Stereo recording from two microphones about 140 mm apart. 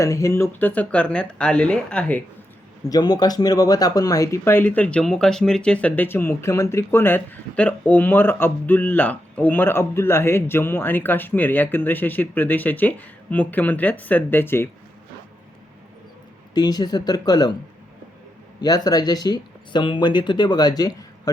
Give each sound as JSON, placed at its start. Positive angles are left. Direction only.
{"t": 0.0, "sound": "speech", "side_deg": 20}
{"t": 2.9, "sound": "speech", "side_deg": 30}
{"t": 16.6, "sound": "speech", "side_deg": 30}
{"t": 18.6, "sound": "speech", "side_deg": 30}